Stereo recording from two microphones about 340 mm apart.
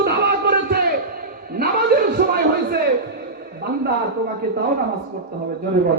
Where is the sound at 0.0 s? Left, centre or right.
Right.